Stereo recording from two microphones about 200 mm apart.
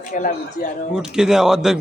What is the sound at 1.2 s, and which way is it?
Speech, 5° right (ahead or behind).